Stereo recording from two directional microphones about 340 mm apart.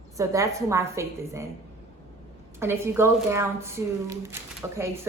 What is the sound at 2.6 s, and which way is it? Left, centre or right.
A woman's voice, centre.